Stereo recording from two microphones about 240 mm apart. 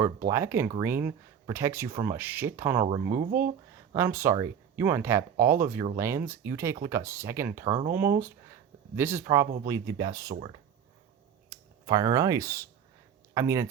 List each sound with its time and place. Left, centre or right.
0.3 s speech: centre
2.8 s speech: right
3.9 s speech: centre
9.0 s speech: centre
11.4 s speech: centre